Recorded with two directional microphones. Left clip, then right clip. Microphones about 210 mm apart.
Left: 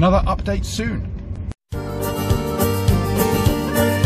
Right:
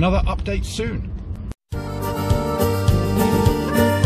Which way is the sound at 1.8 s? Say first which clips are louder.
Left 1 dB; centre (ahead or behind).